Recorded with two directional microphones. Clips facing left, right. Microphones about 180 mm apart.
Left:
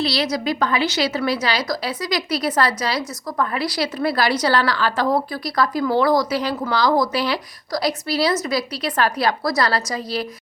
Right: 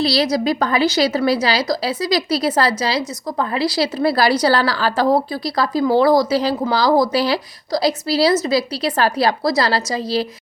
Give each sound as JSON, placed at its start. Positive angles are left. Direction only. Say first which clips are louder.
{"t": 0.0, "sound": "a woman's voice", "louder": "right 4 dB", "side_deg": -35}